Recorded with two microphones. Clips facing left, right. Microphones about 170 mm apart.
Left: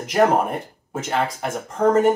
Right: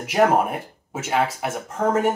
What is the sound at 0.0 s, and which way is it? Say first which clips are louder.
Speech: left 1 dB; 5° right (ahead or behind).